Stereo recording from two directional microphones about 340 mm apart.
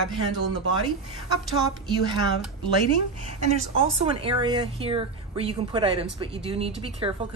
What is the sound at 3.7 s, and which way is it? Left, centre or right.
A woman's voice, centre.